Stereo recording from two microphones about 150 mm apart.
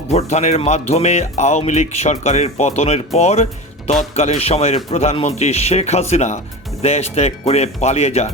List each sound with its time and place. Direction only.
0.1 s speech: 45° left (ahead or behind)